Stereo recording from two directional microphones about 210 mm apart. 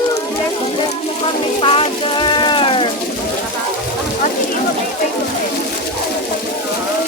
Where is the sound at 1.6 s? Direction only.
25° left (ahead or behind).